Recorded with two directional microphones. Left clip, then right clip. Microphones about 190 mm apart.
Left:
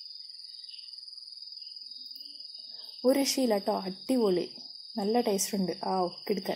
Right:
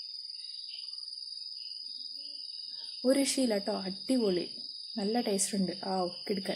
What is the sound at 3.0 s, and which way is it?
Speech, 10° left (ahead or behind).